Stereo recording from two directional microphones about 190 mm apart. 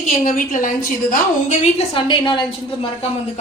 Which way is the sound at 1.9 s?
25° left (ahead or behind).